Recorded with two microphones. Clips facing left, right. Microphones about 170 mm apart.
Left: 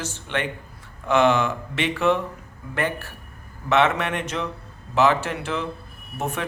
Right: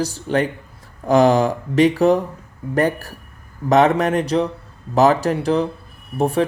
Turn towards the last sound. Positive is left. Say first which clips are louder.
# right 10 dB
turn(degrees=-35)  # may be behind; listen again after turning